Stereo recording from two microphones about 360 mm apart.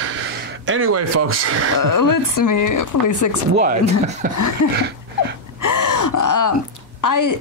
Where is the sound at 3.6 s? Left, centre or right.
Centre.